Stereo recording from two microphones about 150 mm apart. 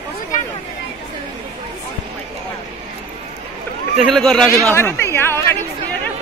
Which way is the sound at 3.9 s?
Centre (ahead or behind).